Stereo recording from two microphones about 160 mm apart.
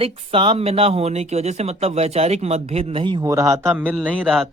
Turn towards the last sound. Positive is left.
turn(degrees=-10)  # may be behind; listen again after turning